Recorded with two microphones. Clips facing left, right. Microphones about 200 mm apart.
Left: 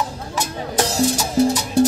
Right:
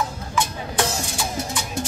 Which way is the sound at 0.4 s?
40° left (ahead or behind).